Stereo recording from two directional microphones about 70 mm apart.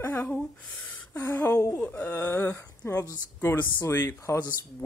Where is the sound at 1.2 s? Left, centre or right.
Left.